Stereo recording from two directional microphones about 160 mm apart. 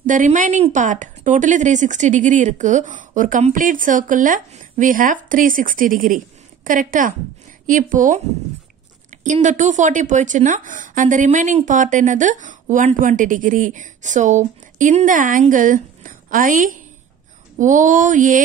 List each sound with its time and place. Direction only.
0.0 s a woman's voice: 55° right (ahead or behind)
9.2 s a woman's voice: 50° right (ahead or behind)